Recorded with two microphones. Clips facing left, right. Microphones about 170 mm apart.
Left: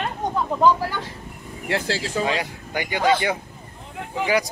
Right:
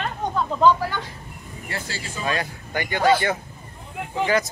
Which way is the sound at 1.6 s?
85° left.